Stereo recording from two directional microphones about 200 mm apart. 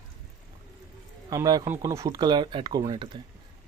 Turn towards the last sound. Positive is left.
turn(degrees=-20)  # may be behind; listen again after turning